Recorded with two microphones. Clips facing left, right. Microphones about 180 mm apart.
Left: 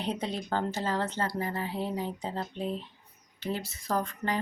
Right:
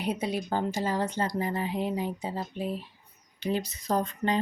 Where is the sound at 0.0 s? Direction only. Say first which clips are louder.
Right 3 dB; 10° right (ahead or behind).